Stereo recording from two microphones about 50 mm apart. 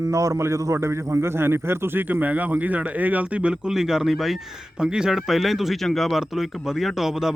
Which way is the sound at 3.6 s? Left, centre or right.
Centre.